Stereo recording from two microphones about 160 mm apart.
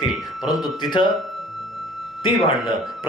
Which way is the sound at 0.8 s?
30° left (ahead or behind).